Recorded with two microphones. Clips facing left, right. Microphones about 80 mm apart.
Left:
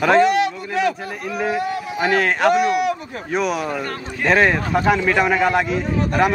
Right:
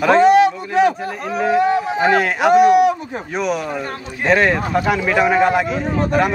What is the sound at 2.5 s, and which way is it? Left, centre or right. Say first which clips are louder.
Speech: right 7 dB; right.